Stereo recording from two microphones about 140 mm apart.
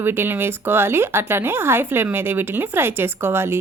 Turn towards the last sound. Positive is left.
turn(degrees=-15)  # may be behind; listen again after turning